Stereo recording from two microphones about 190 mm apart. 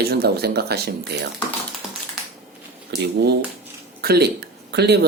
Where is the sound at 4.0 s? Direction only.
55° right (ahead or behind).